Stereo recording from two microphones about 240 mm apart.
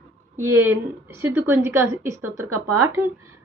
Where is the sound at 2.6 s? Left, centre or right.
Right.